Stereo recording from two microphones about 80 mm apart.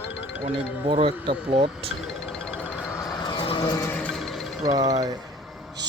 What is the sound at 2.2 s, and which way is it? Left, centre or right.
Music, centre.